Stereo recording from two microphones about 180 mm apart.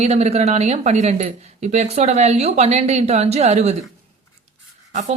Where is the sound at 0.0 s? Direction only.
35° right (ahead or behind).